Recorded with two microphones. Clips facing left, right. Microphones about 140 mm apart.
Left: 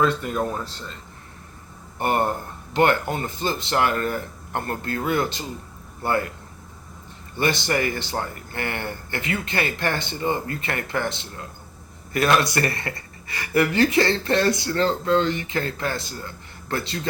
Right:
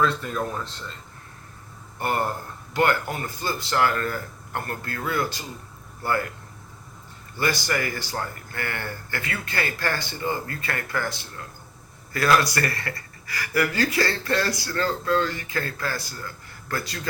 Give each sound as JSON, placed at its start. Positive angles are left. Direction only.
{"t": 2.0, "sound": "speech", "side_deg": 20}
{"t": 7.3, "sound": "speech", "side_deg": 25}